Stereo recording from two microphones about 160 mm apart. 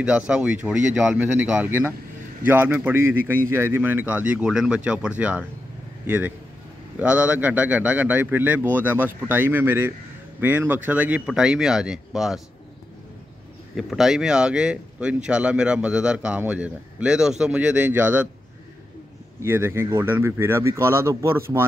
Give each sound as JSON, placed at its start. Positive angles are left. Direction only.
{"t": 0.3, "sound": "a man's voice", "side_deg": -5}
{"t": 13.7, "sound": "speech", "side_deg": 0}
{"t": 19.4, "sound": "a man's voice", "side_deg": -15}